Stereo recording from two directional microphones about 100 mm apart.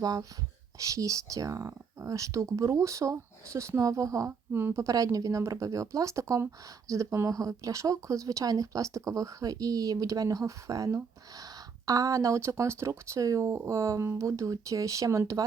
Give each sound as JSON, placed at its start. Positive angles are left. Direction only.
{"t": 0.0, "sound": "speech", "side_deg": -35}
{"t": 4.3, "sound": "speech", "side_deg": -20}